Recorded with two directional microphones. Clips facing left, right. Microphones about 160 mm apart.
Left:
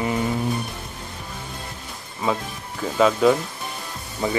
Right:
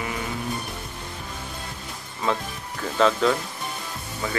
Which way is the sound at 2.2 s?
10° left (ahead or behind).